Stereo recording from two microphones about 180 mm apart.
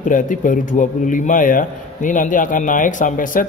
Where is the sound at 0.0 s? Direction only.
45° left (ahead or behind).